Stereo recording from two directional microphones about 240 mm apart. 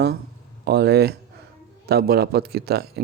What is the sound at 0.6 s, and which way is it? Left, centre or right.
Speech, right.